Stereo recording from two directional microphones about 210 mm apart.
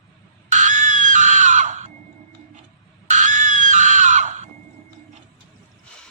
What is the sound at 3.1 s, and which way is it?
Screaming, 35° right (ahead or behind).